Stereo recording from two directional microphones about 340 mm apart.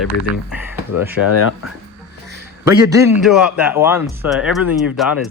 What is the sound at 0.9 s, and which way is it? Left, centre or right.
Speech, left.